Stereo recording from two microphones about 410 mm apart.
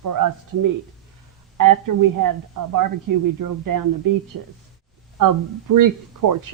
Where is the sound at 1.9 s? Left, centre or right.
Right.